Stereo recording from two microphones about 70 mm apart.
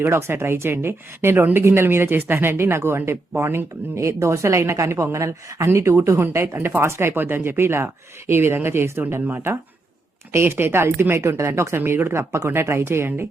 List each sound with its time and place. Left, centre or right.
0.0 s speech: right